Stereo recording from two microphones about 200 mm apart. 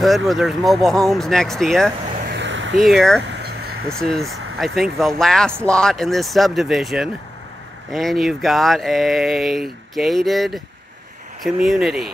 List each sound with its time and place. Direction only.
0.0 s speech: centre (ahead or behind)
2.3 s a sound: 65° right (ahead or behind)
2.8 s speech: centre (ahead or behind)
3.3 s vehicle: 55° right (ahead or behind)
3.9 s speech: centre (ahead or behind)